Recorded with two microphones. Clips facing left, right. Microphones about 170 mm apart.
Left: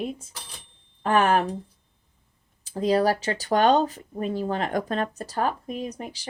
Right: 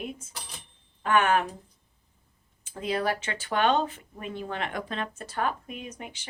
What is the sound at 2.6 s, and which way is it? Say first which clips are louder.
Speech: left 7 dB; 35° left (ahead or behind).